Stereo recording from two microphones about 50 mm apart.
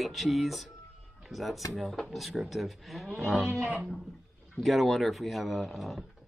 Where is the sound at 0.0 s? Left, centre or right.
Centre.